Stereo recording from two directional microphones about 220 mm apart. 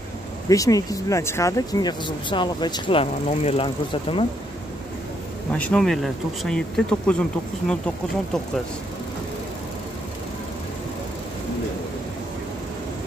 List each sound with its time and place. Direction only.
0.5 s speech: 15° left (ahead or behind)
5.5 s speech: 5° left (ahead or behind)